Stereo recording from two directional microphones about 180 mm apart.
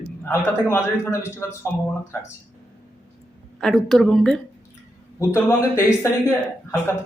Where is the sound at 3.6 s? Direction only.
Centre (ahead or behind).